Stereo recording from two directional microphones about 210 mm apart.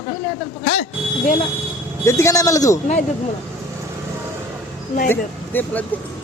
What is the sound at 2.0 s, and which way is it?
Speech, 15° left (ahead or behind).